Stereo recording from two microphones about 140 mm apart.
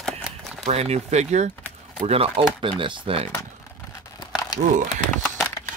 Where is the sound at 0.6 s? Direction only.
50° right (ahead or behind).